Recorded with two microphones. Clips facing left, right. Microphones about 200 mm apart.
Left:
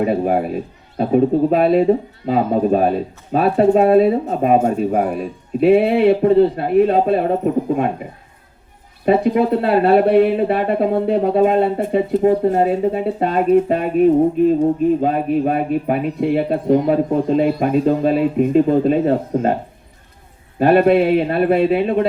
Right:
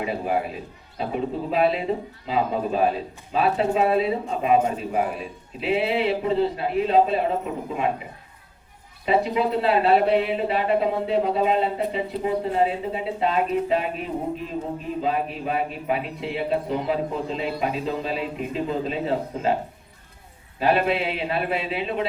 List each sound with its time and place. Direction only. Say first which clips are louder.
0.0 s a man's voice: left 8 dB; 45° left (ahead or behind)
9.0 s a man's voice: left 7 dB; 50° left (ahead or behind)
20.6 s a man's voice: left 10 dB; 50° left (ahead or behind)